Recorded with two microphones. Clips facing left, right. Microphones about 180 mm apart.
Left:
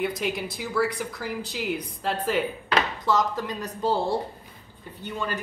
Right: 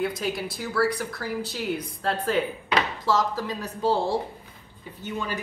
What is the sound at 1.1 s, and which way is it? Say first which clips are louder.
Speech: right 2 dB; 15° left (ahead or behind).